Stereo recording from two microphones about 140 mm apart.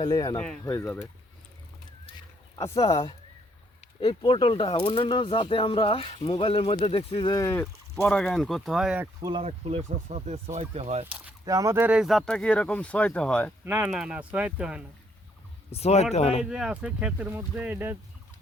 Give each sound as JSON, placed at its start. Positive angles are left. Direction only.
{"t": 0.0, "sound": "speech", "side_deg": 30}
{"t": 0.3, "sound": "speech", "side_deg": 5}
{"t": 0.6, "sound": "speech", "side_deg": 20}
{"t": 2.6, "sound": "speech", "side_deg": 20}
{"t": 2.8, "sound": "speech", "side_deg": 35}
{"t": 4.2, "sound": "speech", "side_deg": 35}
{"t": 7.5, "sound": "speech", "side_deg": 20}
{"t": 8.0, "sound": "speech", "side_deg": 5}
{"t": 9.4, "sound": "speech", "side_deg": -50}
{"t": 11.4, "sound": "speech", "side_deg": -25}
{"t": 13.7, "sound": "speech", "side_deg": -15}
{"t": 15.7, "sound": "speech", "side_deg": 50}
{"t": 16.4, "sound": "speech", "side_deg": -5}